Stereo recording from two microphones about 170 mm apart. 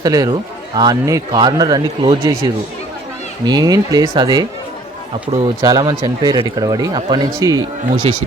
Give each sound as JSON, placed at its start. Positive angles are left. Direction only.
{"t": 0.0, "sound": "a man's voice", "side_deg": -20}
{"t": 3.4, "sound": "a man's voice", "side_deg": -25}